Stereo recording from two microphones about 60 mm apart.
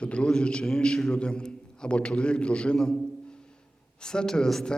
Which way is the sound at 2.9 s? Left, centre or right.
Centre.